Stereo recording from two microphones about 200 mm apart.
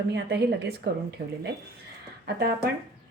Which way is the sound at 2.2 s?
50° right (ahead or behind).